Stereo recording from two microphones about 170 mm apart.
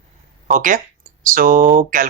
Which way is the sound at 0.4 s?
50° right (ahead or behind).